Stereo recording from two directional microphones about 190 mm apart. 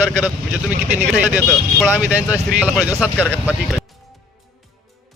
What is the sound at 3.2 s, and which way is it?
Speech, 10° left (ahead or behind).